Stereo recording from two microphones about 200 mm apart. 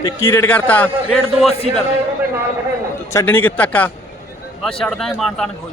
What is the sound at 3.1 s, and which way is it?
A man's voice, 10° left (ahead or behind).